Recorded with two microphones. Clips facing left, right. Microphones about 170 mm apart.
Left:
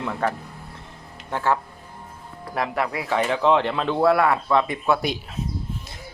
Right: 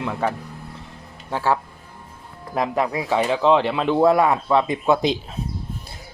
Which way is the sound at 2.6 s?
20° right (ahead or behind).